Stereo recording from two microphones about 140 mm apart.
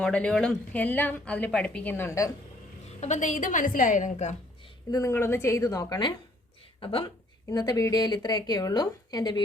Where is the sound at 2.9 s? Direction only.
55° left (ahead or behind).